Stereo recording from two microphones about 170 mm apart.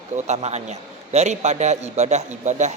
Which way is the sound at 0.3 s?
40° right (ahead or behind).